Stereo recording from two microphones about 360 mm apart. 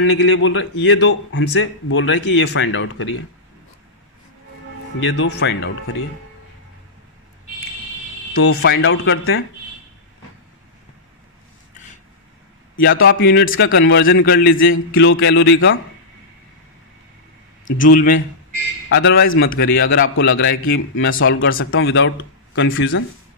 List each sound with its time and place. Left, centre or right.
0.0 s a man's voice: left
5.0 s a man's voice: left
8.3 s a man's voice: left
12.8 s a man's voice: left
17.6 s a man's voice: left